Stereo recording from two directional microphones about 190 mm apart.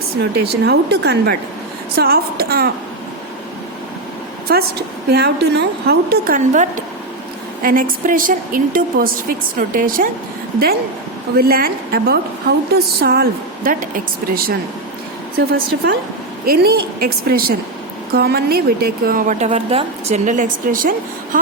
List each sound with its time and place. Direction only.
0.4 s a woman's voice: 60° right (ahead or behind)
4.5 s a woman's voice: 55° right (ahead or behind)
11.3 s a woman's voice: 50° right (ahead or behind)